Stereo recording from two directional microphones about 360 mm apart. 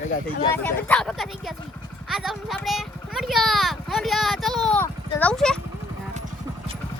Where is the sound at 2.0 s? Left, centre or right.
Centre.